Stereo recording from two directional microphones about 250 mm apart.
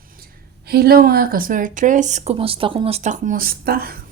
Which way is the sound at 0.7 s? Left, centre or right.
Right.